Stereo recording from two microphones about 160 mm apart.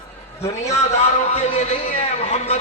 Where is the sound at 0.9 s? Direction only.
45° left (ahead or behind).